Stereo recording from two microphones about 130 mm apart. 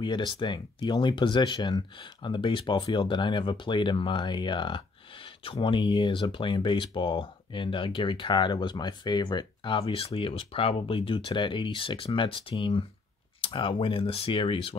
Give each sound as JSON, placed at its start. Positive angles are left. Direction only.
{"t": 0.0, "sound": "speech", "side_deg": 35}